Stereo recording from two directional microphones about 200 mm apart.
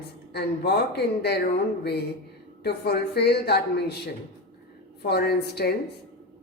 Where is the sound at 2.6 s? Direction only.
50° left (ahead or behind).